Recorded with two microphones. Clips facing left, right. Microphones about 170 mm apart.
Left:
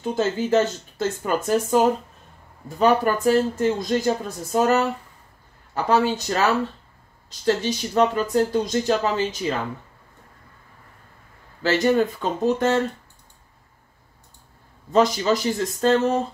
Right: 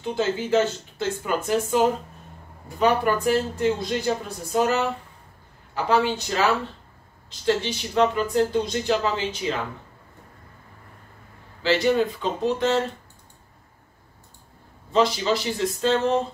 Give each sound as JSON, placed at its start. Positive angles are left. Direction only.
{"t": 0.0, "sound": "speech", "side_deg": 45}
{"t": 5.9, "sound": "speech", "side_deg": 45}
{"t": 11.6, "sound": "speech", "side_deg": 45}
{"t": 14.9, "sound": "speech", "side_deg": 45}